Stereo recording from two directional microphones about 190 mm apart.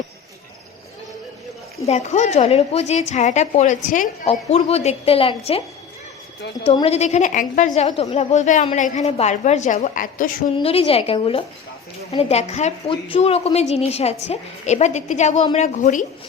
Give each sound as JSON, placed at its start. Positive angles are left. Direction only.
{"t": 1.9, "sound": "a woman's voice", "side_deg": 35}
{"t": 4.3, "sound": "a woman's voice", "side_deg": 30}
{"t": 6.7, "sound": "a woman's voice", "side_deg": 30}
{"t": 10.6, "sound": "a woman's voice", "side_deg": 30}